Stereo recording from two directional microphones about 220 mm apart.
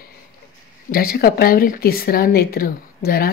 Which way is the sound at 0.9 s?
40° left (ahead or behind).